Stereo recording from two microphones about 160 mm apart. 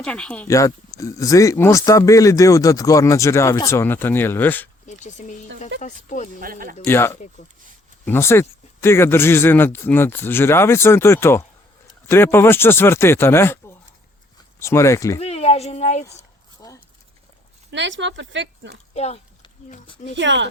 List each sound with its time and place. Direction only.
0.0 s speech: 5° left (ahead or behind)
0.4 s speech: 20° left (ahead or behind)
4.9 s speech: 45° left (ahead or behind)
6.4 s speech: 60° right (ahead or behind)
6.8 s speech: 15° left (ahead or behind)
15.2 s a woman's voice: 40° left (ahead or behind)
17.7 s speech: 90° right
18.9 s speech: 40° left (ahead or behind)